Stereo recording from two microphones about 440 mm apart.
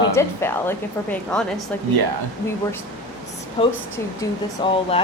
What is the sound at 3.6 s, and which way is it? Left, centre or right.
Speech, centre.